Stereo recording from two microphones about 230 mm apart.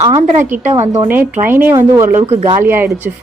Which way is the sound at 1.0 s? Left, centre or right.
Centre.